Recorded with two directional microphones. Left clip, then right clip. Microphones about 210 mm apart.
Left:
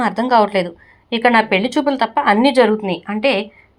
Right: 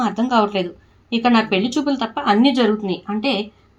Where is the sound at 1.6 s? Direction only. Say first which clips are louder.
Left 4 dB; 25° left (ahead or behind).